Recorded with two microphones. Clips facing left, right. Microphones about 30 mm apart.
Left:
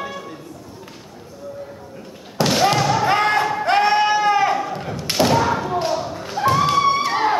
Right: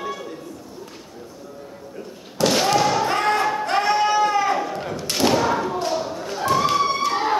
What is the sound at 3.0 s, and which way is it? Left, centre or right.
Music, left.